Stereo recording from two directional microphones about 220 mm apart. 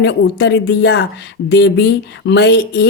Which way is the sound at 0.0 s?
50° left (ahead or behind).